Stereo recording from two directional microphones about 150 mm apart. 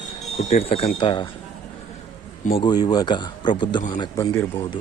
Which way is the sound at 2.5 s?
30° left (ahead or behind).